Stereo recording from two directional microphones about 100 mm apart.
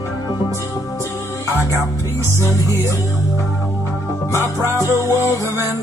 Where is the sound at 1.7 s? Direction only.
30° right (ahead or behind).